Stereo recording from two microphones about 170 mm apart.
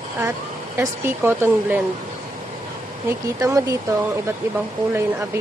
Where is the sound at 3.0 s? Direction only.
20° right (ahead or behind).